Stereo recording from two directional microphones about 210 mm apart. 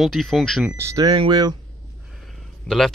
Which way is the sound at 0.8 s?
15° right (ahead or behind).